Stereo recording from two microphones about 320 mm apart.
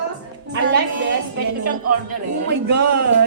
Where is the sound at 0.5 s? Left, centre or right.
Right.